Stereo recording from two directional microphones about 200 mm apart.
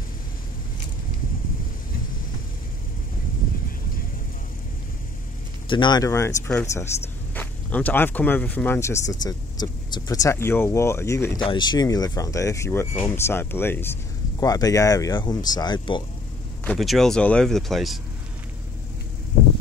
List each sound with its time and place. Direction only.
5.7 s speech: 20° left (ahead or behind)
16.6 s speech: centre (ahead or behind)